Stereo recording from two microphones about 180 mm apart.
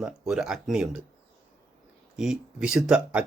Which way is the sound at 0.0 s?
5° right (ahead or behind).